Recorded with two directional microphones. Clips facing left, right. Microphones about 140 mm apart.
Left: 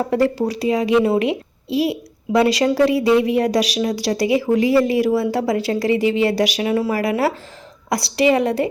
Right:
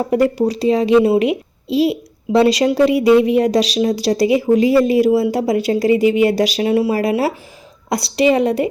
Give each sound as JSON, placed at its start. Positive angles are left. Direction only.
{"t": 0.1, "sound": "a woman's voice", "side_deg": -20}